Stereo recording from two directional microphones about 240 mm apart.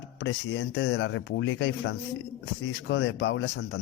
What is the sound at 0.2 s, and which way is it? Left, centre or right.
Speech, left.